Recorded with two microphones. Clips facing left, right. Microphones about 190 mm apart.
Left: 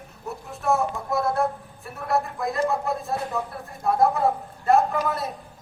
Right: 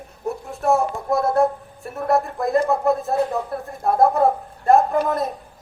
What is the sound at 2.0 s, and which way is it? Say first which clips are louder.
Speech: right 5 dB; 50° right (ahead or behind).